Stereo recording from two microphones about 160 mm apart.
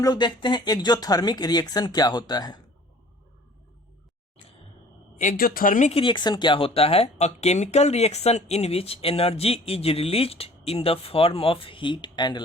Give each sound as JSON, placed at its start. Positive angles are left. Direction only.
{"t": 0.0, "sound": "speech", "side_deg": 25}
{"t": 5.1, "sound": "a woman's voice", "side_deg": 55}
{"t": 5.9, "sound": "speech", "side_deg": 30}